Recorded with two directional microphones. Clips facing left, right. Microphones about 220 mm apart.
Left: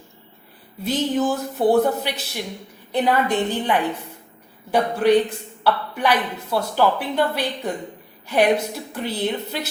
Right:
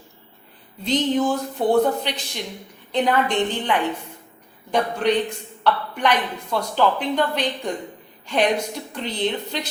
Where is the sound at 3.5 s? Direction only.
10° left (ahead or behind).